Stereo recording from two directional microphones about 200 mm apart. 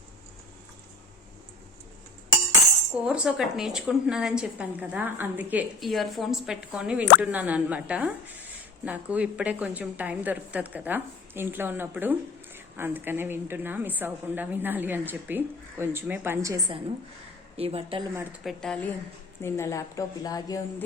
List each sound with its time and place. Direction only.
3.0 s a woman's voice: 5° right (ahead or behind)
17.6 s a woman's voice: 30° right (ahead or behind)
18.4 s a woman's voice: 5° left (ahead or behind)